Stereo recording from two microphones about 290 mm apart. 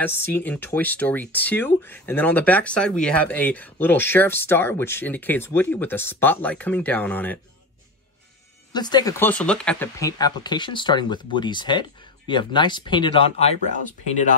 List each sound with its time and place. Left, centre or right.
0.0 s speech: centre
8.7 s speech: centre